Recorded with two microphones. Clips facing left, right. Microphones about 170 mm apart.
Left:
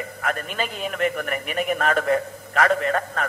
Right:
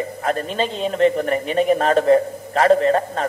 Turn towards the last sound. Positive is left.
turn(degrees=-30)  # may be behind; listen again after turning